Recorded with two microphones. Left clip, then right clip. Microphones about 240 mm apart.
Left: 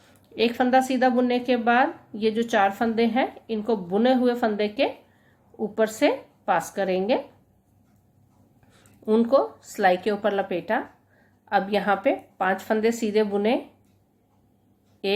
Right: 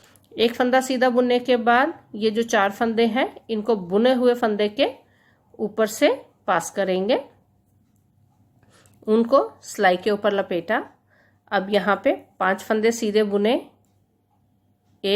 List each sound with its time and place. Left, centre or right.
0.0 s a woman's voice: right
9.0 s a woman's voice: right
15.0 s a woman's voice: right